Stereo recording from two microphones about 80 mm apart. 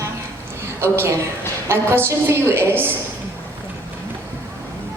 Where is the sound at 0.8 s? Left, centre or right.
Right.